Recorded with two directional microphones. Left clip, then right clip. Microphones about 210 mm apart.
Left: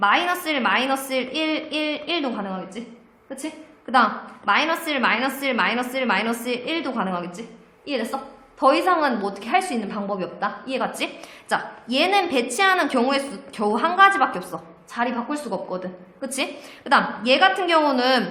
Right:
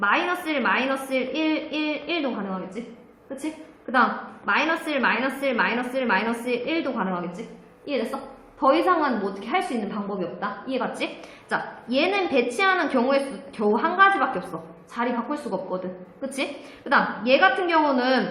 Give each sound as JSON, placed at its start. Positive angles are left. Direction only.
{"t": 0.0, "sound": "a woman's voice", "side_deg": 45}
{"t": 3.9, "sound": "a woman's voice", "side_deg": 45}
{"t": 8.6, "sound": "a woman's voice", "side_deg": 45}